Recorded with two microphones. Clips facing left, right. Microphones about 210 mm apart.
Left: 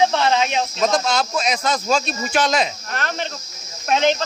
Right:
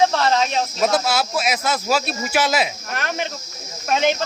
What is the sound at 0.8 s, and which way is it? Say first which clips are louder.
Speech: even; 5° right (ahead or behind).